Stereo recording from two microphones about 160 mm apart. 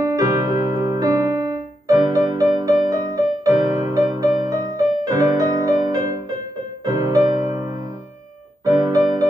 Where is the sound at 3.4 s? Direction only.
20° right (ahead or behind).